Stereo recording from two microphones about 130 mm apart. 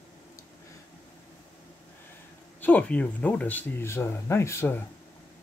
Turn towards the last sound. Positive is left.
turn(degrees=20)  # may be behind; listen again after turning